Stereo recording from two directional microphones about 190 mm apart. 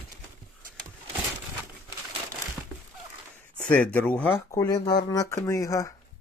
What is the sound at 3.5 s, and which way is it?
Speech, 5° left (ahead or behind).